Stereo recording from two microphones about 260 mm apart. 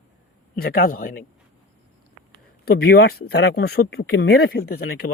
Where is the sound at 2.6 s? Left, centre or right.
Left.